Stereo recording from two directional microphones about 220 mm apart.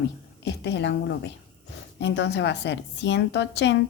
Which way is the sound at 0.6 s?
50° left (ahead or behind).